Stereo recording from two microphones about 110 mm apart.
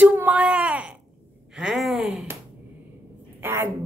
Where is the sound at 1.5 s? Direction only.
5° right (ahead or behind).